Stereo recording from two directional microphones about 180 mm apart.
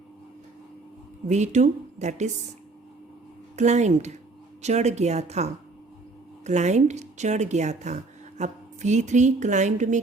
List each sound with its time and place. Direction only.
1.3 s speech: 40° right (ahead or behind)
3.5 s speech: 40° right (ahead or behind)